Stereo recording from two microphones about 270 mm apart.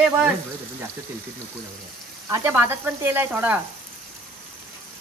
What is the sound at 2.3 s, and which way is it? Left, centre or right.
Speech, centre.